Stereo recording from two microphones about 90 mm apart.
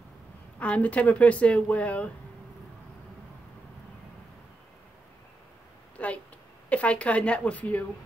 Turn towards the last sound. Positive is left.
turn(degrees=15)  # may be behind; listen again after turning